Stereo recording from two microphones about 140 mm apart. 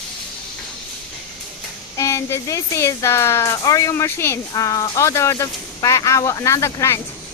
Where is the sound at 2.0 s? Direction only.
20° left (ahead or behind).